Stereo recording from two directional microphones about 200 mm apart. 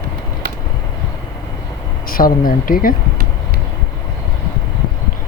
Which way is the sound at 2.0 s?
45° left (ahead or behind).